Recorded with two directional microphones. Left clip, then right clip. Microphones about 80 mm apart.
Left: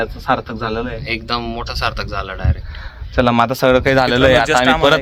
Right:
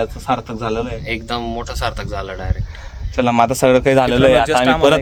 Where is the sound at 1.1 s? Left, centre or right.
Right.